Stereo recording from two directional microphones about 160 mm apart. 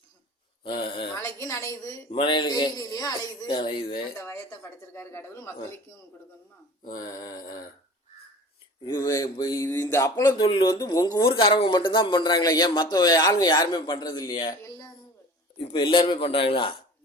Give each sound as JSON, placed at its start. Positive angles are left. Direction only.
{"t": 0.6, "sound": "a sound", "side_deg": 30}
{"t": 1.1, "sound": "a man's voice", "side_deg": 20}
{"t": 2.1, "sound": "a man's voice", "side_deg": 30}
{"t": 4.2, "sound": "speech", "side_deg": 15}
{"t": 7.0, "sound": "a man's voice", "side_deg": 25}
{"t": 8.9, "sound": "a man's voice", "side_deg": 20}
{"t": 11.3, "sound": "a man's voice", "side_deg": 35}